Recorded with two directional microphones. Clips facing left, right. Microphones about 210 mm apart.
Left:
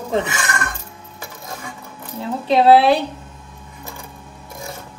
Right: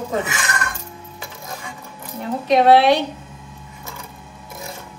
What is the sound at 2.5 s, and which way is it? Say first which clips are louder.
Speech: left 1 dB; 30° left (ahead or behind).